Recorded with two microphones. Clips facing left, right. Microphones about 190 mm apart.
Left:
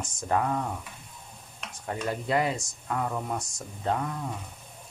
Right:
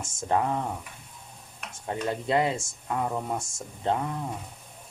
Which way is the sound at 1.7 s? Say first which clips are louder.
Right 1 dB; 20° right (ahead or behind).